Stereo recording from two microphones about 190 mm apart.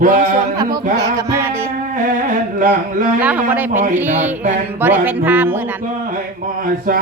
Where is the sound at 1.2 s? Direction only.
15° right (ahead or behind).